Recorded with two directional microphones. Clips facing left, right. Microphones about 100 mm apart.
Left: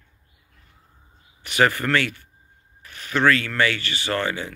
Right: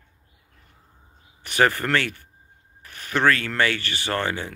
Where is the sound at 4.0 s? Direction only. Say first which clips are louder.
Left 2 dB; 40° right (ahead or behind).